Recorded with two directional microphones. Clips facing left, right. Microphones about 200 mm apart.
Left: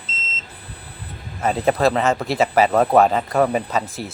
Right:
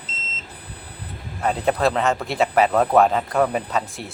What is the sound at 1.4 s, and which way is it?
Speech, centre (ahead or behind).